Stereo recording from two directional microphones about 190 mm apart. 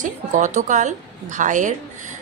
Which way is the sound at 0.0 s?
40° right (ahead or behind).